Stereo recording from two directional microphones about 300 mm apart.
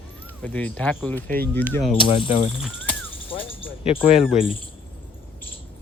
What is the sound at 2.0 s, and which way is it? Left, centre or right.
Speech, centre.